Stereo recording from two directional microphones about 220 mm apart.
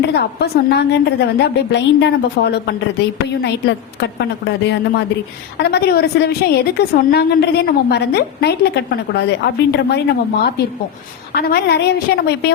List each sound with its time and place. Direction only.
0.1 s a woman's voice: 50° left (ahead or behind)
11.3 s a woman's voice: 45° left (ahead or behind)